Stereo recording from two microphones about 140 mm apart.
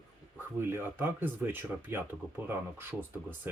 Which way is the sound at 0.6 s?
15° right (ahead or behind).